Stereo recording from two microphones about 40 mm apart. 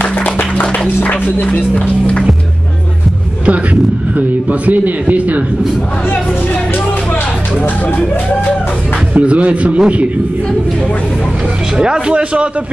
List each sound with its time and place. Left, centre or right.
0.0 s a sound: left
1.0 s speech: left
4.5 s a man's voice: right
9.1 s a man's voice: right
11.8 s a man's voice: right